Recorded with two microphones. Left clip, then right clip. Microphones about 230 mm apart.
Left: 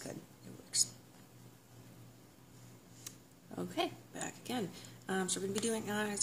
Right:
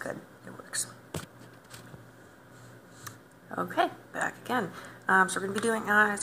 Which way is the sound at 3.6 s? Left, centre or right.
Left.